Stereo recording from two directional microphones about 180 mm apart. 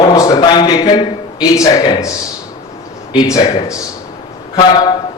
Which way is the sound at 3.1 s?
20° left (ahead or behind).